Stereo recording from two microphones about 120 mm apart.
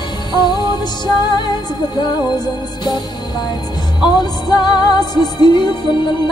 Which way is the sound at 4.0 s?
35° left (ahead or behind).